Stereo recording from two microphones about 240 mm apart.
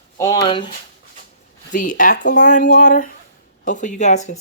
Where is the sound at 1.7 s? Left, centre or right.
Left.